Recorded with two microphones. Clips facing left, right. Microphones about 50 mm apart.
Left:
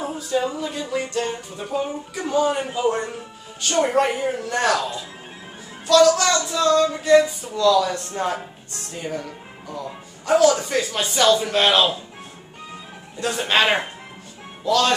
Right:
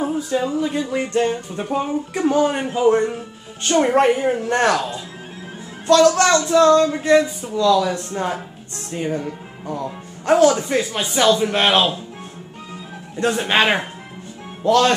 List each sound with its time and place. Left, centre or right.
0.0 s a sound: centre
0.6 s music: centre
1.6 s speech: right
2.7 s speech: centre
3.6 s music: right
4.5 s speech: right
5.9 s speech: right
6.5 s music: right
7.2 s speech: centre
8.9 s speech: right
10.5 s speech: centre
11.5 s music: right
13.3 s speech: centre
14.6 s speech: right